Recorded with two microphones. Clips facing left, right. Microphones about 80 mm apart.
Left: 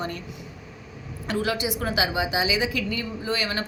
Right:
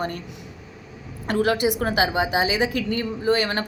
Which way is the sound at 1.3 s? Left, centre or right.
Right.